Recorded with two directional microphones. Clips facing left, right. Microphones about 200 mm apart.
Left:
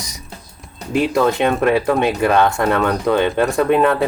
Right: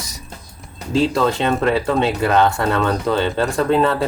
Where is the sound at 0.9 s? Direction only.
15° left (ahead or behind).